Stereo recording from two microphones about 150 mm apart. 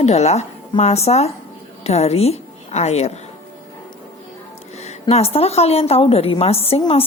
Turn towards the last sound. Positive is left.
turn(degrees=40)  # may be behind; listen again after turning